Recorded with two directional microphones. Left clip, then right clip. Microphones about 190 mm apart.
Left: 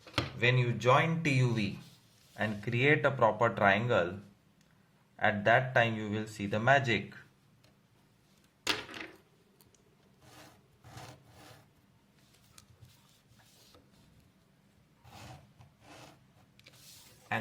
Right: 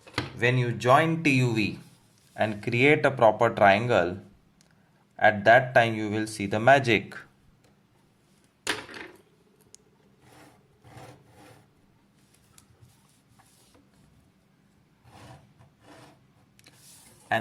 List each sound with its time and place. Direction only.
0.3 s speech: 30° right (ahead or behind)
5.1 s speech: 25° right (ahead or behind)